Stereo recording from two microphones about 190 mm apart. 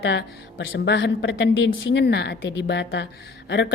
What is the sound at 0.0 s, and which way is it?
A woman's voice, 65° left (ahead or behind).